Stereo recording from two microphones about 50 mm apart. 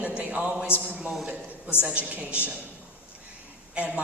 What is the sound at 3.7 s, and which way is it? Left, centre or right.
Speech, right.